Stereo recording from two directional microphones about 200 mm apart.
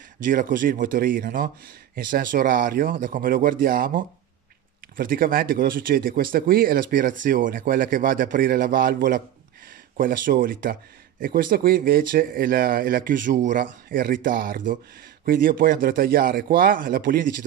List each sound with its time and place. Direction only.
0.2 s speech: 40° right (ahead or behind)